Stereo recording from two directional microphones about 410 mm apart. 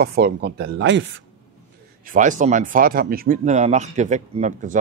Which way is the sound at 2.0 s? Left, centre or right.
Centre.